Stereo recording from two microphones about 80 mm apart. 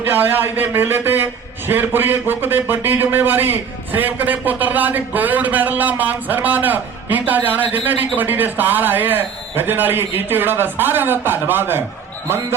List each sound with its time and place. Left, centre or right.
0.0 s a man's voice: right